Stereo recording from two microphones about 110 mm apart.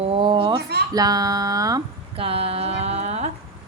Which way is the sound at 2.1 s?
60° right (ahead or behind).